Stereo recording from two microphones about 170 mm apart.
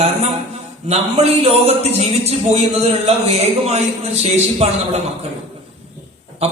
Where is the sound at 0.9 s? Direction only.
40° right (ahead or behind).